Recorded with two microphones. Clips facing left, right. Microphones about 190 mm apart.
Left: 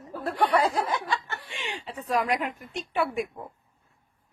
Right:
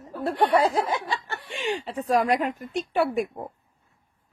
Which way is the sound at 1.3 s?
40° right (ahead or behind).